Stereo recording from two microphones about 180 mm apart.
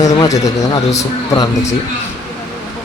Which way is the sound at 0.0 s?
20° left (ahead or behind).